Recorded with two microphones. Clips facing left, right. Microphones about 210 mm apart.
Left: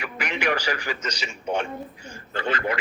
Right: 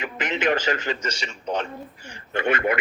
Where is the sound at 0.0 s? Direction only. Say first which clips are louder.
Right 3 dB; 20° right (ahead or behind).